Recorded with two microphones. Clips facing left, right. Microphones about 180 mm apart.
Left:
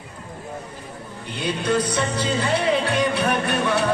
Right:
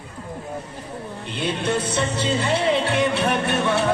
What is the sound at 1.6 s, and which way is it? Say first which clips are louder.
Music: left 2 dB; 25° right (ahead or behind).